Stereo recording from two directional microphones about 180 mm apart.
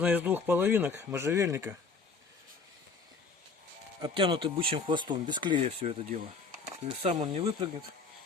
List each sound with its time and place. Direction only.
0.0 s speech: 10° right (ahead or behind)
4.0 s speech: 30° right (ahead or behind)
5.6 s speech: 35° right (ahead or behind)